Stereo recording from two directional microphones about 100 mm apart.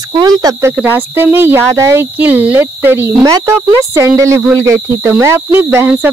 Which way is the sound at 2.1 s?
15° right (ahead or behind).